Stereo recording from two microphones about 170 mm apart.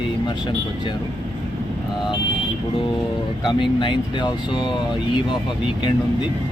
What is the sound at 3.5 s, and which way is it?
Speech, 30° left (ahead or behind).